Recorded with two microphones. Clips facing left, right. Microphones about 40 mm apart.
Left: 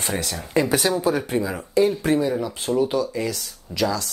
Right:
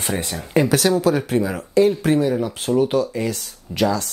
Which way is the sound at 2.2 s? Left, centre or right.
Right.